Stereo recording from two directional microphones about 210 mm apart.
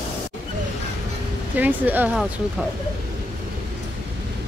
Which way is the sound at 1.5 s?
10° right (ahead or behind).